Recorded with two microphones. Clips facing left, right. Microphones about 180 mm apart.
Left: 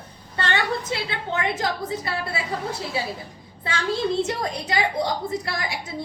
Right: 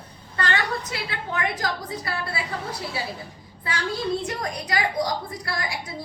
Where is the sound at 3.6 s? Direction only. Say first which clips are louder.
Left 3 dB; 25° left (ahead or behind).